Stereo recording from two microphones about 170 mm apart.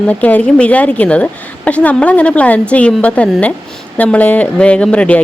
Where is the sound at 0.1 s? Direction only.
10° left (ahead or behind).